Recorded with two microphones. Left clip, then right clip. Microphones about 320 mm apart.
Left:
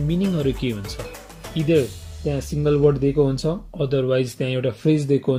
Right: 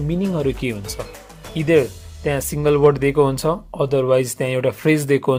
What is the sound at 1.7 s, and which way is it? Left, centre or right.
Speech, centre.